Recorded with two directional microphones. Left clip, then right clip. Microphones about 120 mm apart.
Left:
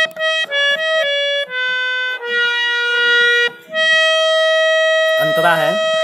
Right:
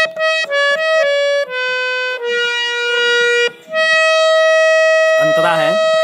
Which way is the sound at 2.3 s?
30° right (ahead or behind).